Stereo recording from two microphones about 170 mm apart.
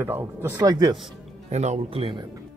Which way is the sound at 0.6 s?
25° right (ahead or behind).